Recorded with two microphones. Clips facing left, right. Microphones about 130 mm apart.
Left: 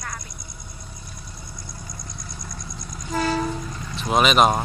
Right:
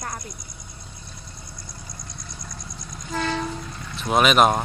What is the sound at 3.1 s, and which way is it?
Vehicle, 5° left (ahead or behind).